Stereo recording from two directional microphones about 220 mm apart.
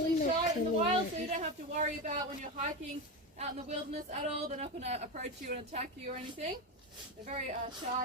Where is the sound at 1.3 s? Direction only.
35° right (ahead or behind).